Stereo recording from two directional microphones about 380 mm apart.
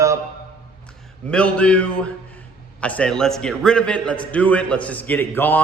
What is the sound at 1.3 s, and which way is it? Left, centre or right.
A man's voice, centre.